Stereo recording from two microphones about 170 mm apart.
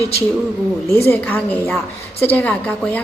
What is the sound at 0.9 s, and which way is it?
Speech, 15° left (ahead or behind).